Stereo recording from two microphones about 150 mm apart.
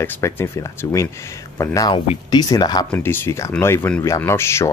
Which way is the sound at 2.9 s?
15° left (ahead or behind).